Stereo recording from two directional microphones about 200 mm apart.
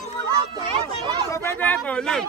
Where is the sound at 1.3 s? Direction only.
10° left (ahead or behind).